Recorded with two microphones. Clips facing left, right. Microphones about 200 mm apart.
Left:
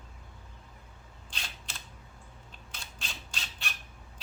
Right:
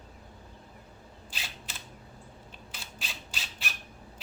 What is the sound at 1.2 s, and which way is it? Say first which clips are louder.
Camera: right 1 dB; 5° right (ahead or behind).